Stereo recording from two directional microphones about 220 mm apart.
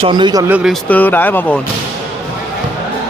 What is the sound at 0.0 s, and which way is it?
Speech, 20° right (ahead or behind).